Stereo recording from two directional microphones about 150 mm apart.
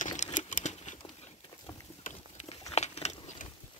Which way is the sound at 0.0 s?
55° left (ahead or behind).